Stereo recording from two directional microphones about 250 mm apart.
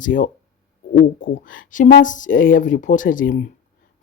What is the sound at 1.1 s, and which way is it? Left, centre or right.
Speech, left.